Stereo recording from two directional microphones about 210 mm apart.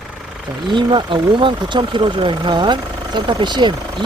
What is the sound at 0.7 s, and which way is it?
Speech, 20° right (ahead or behind).